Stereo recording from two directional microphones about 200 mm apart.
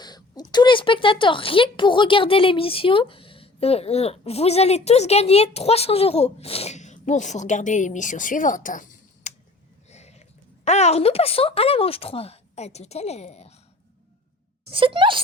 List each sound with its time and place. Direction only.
0.0 s speech: 20° left (ahead or behind); by 9.3 s 40° left (ahead or behind)
9.9 s a sound: 35° left (ahead or behind)
10.7 s speech: 35° left (ahead or behind)
14.7 s speech: 25° right (ahead or behind)